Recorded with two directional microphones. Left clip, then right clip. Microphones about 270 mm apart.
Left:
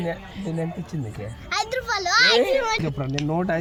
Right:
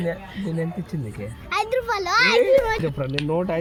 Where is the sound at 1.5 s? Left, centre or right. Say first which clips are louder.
Right 2 dB; centre.